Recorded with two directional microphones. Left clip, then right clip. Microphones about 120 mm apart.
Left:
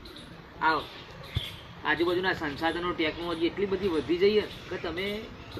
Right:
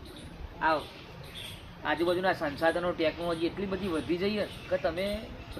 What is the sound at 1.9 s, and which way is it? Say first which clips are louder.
A man's voice: left 1 dB; 20° right (ahead or behind).